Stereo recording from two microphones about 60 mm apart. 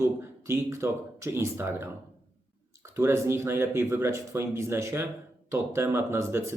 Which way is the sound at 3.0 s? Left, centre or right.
Right.